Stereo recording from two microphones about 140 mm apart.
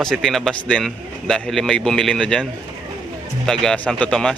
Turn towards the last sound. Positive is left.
turn(degrees=5)  # may be behind; listen again after turning